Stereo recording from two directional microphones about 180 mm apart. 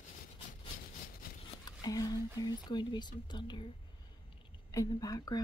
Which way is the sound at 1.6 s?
20° left (ahead or behind).